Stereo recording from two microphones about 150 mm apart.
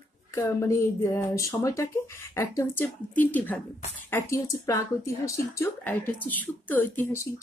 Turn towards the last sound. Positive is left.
turn(degrees=15)  # may be behind; listen again after turning